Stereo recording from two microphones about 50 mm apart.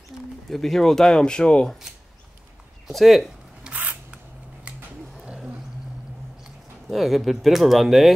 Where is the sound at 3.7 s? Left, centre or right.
Centre.